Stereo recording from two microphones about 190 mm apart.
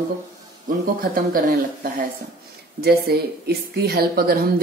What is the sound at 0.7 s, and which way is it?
Speech, 50° right (ahead or behind).